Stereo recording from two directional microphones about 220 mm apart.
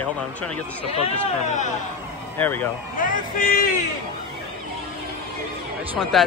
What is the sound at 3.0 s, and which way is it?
Speech, 40° left (ahead or behind).